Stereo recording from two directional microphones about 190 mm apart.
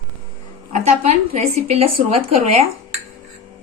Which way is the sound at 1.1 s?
35° right (ahead or behind).